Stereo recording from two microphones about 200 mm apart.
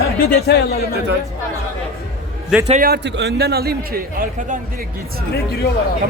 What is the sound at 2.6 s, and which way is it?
Speech, 40° right (ahead or behind).